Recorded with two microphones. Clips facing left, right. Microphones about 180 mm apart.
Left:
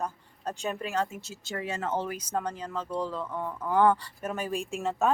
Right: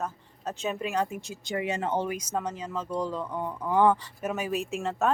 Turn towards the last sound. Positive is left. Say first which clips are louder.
# even
turn(degrees=0)  # may be behind; listen again after turning